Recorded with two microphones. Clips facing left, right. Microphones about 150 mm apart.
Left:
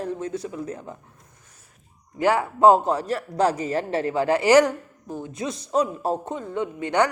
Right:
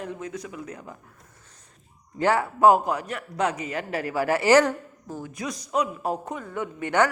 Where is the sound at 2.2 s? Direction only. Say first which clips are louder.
Left 2 dB; 15° left (ahead or behind).